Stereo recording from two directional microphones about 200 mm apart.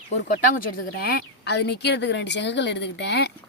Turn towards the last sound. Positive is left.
turn(degrees=60)  # may be behind; listen again after turning